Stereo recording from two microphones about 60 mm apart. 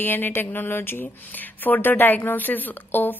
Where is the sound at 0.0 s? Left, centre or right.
Left.